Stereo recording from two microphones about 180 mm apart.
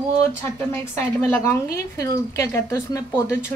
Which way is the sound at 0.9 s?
15° left (ahead or behind).